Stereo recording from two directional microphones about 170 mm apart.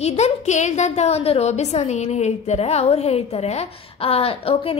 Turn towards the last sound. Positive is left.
turn(degrees=35)  # may be behind; listen again after turning